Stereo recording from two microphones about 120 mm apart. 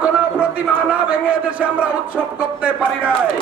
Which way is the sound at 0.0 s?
10° right (ahead or behind).